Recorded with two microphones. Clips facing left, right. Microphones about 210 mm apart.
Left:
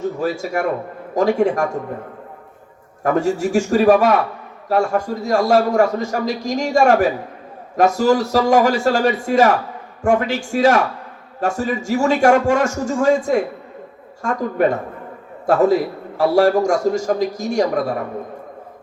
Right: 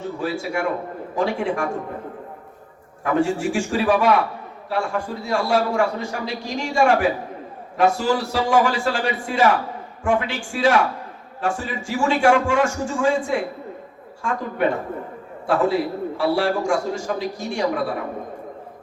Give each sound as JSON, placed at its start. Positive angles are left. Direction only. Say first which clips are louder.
{"t": 0.0, "sound": "a man's voice", "louder": "left 4 dB", "side_deg": 40}
{"t": 3.0, "sound": "a man's voice", "louder": "left 3 dB", "side_deg": 40}